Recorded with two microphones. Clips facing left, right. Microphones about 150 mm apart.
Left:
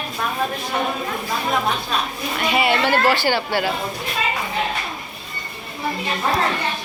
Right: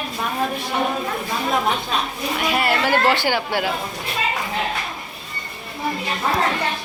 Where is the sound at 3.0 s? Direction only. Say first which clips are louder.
Left 1 dB; 20° right (ahead or behind).